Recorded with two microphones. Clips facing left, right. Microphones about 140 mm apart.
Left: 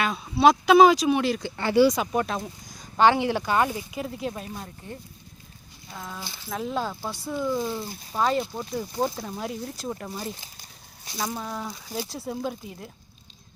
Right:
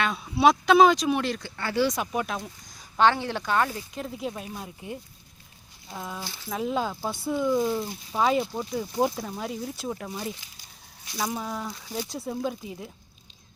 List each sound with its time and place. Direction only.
0.0 s speech: centre (ahead or behind)
1.4 s speech: 20° left (ahead or behind)
1.9 s speech: centre (ahead or behind)
3.1 s speech: 10° left (ahead or behind); by 4.9 s 10° right (ahead or behind)
6.0 s speech: 5° right (ahead or behind)